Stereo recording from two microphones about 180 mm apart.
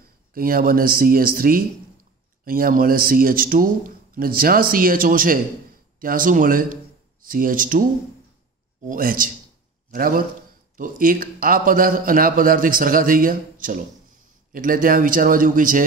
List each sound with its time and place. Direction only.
0.3 s a man's voice: 55° right (ahead or behind)
8.8 s a man's voice: 50° right (ahead or behind)